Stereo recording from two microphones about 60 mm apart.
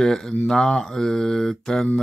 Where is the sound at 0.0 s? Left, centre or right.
Centre.